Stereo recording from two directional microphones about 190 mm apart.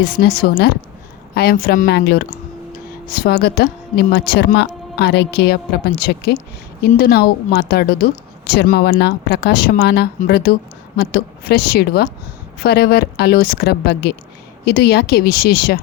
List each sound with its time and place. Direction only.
0.0 s a woman's voice: 55° left (ahead or behind)